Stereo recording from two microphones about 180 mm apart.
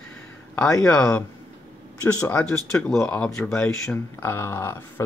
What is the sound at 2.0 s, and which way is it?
Speech, 10° left (ahead or behind).